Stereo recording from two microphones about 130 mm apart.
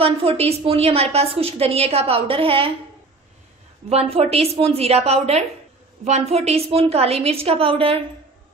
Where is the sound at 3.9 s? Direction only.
50° right (ahead or behind).